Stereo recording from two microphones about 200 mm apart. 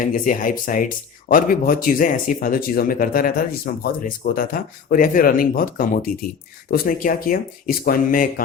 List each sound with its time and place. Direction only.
0.0 s speech: 40° left (ahead or behind)